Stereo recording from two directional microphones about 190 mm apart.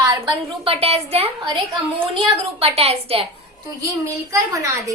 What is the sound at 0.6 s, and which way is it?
A woman's voice, 30° right (ahead or behind).